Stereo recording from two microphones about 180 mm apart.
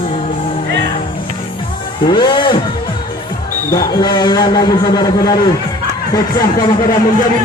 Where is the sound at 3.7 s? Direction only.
20° left (ahead or behind).